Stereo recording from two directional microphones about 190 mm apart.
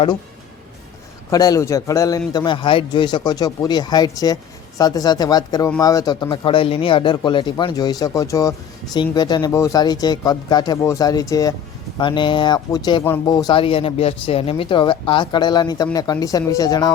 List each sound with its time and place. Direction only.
1.3 s speech: 20° left (ahead or behind)